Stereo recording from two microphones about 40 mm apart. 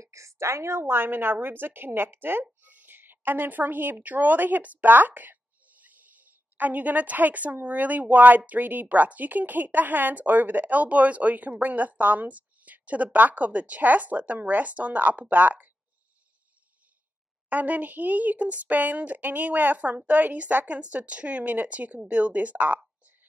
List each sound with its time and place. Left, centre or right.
0.7 s a woman's voice: right
2.6 s speech: right
17.5 s speech: right